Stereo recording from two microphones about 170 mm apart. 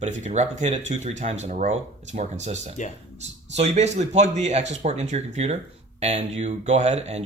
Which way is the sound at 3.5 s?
40° right (ahead or behind).